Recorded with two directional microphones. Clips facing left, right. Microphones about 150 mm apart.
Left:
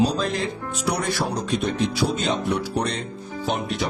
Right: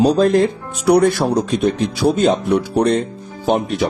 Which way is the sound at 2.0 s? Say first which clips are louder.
Right 13 dB; 50° right (ahead or behind).